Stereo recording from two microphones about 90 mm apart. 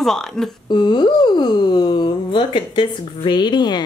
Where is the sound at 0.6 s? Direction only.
55° left (ahead or behind).